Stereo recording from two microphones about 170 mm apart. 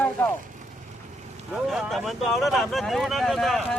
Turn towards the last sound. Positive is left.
turn(degrees=0)  # may be behind; listen again after turning